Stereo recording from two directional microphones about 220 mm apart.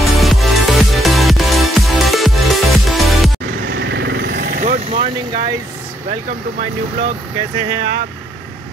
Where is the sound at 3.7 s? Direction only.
50° right (ahead or behind).